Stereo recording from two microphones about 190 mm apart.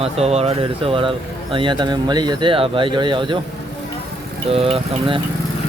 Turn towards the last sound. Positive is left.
turn(degrees=-30)  # may be behind; listen again after turning